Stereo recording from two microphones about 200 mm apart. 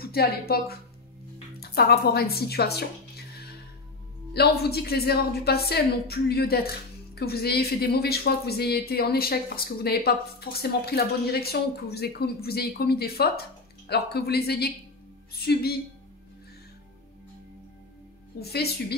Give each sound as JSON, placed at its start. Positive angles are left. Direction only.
{"t": 0.0, "sound": "a woman's voice", "side_deg": 50}
{"t": 18.4, "sound": "speech", "side_deg": 55}